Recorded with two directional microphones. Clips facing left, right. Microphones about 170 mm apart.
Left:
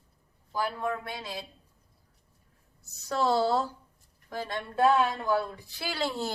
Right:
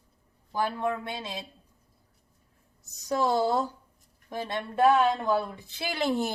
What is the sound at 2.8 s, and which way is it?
A woman's voice, 15° right (ahead or behind).